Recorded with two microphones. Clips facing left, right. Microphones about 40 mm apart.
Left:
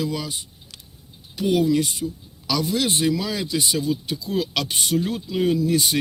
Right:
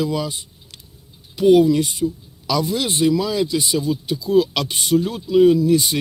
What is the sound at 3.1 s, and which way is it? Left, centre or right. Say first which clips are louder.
Speech: right 5 dB; centre.